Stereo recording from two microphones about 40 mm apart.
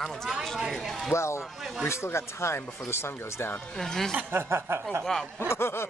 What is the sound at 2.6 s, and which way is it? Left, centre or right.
Speech, left.